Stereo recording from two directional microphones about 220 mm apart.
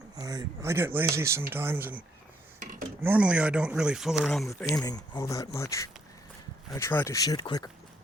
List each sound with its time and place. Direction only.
0.2 s speech: 15° right (ahead or behind)
2.6 s a sound: 40° right (ahead or behind)
3.0 s speech: 5° right (ahead or behind)
4.8 s speech: 15° left (ahead or behind)